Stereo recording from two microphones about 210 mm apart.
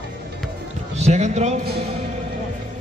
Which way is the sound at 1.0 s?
30° right (ahead or behind).